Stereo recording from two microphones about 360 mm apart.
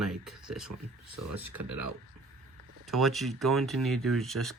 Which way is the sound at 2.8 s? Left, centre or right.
Centre.